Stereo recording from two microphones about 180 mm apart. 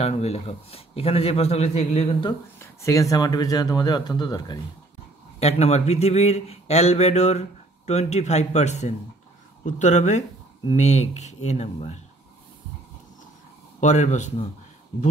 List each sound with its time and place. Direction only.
0.0 s speech: 35° left (ahead or behind)
2.6 s speech: 15° left (ahead or behind)
5.4 s speech: 35° left (ahead or behind)
13.7 s speech: 40° left (ahead or behind)